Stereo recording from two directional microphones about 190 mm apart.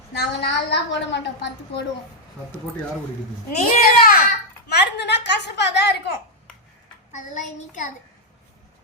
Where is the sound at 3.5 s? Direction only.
50° left (ahead or behind).